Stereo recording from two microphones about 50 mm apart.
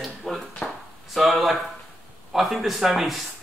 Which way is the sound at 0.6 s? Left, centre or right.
Centre.